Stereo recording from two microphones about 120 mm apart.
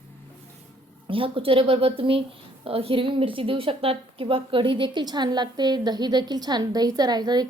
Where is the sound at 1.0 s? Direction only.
50° right (ahead or behind).